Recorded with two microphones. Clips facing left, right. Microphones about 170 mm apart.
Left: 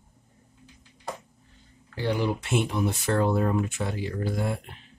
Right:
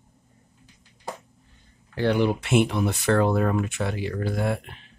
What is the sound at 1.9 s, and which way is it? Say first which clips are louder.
Speech: right 5 dB; 65° right (ahead or behind).